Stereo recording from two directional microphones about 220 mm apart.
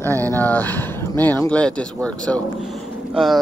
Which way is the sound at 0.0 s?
10° left (ahead or behind).